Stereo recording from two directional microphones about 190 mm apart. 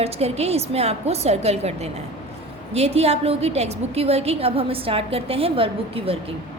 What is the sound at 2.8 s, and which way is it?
A woman's voice, 35° right (ahead or behind).